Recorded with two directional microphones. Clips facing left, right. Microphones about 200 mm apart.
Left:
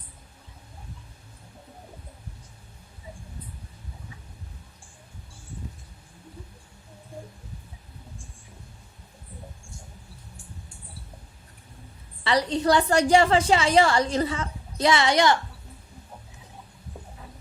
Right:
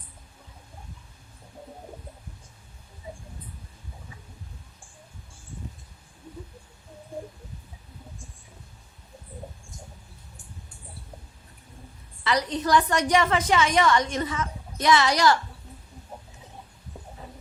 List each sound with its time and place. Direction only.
12.2 s a woman's voice: 30° left (ahead or behind)